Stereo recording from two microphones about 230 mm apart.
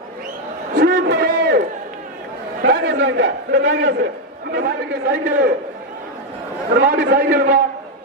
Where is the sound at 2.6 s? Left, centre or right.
Right.